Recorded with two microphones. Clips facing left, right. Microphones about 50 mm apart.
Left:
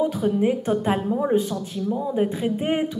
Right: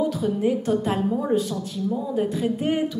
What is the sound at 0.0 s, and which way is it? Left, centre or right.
Speech, left.